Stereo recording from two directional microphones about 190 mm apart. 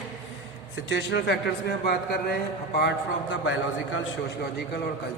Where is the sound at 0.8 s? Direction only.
70° left (ahead or behind).